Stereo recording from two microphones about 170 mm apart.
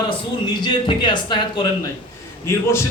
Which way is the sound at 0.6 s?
25° left (ahead or behind).